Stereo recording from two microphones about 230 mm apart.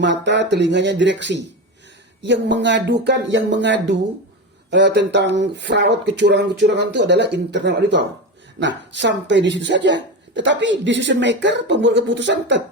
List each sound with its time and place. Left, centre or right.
0.0 s speech: right